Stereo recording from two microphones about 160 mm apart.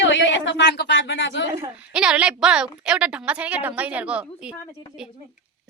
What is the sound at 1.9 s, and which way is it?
A woman's voice, 5° right (ahead or behind).